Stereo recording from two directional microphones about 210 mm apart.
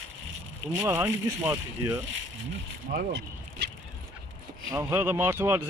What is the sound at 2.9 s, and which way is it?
Speech, 50° right (ahead or behind).